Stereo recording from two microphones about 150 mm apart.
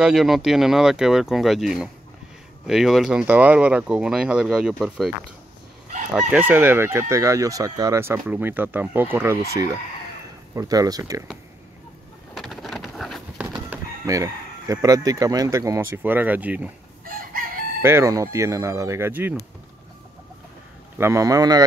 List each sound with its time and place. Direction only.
0.0 s speech: centre (ahead or behind)
6.1 s chicken: 10° right (ahead or behind)
10.5 s speech: 20° right (ahead or behind)
12.4 s boat: centre (ahead or behind)
14.0 s speech: 20° right (ahead or behind)
17.0 s chicken: 70° right (ahead or behind)
17.8 s speech: 20° right (ahead or behind)
21.0 s speech: 20° right (ahead or behind)